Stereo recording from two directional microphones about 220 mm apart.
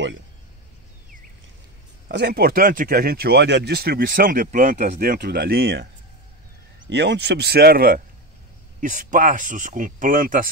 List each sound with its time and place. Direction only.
2.0 s speech: 50° right (ahead or behind)
6.9 s speech: 50° right (ahead or behind)